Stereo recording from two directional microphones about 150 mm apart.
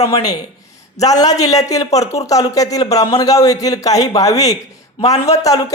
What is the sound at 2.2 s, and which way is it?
Speech, 25° left (ahead or behind).